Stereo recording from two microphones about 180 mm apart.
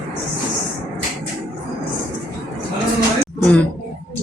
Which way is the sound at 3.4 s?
5° left (ahead or behind).